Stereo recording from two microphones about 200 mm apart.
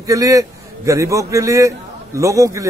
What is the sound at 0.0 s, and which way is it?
A man's voice, 15° right (ahead or behind).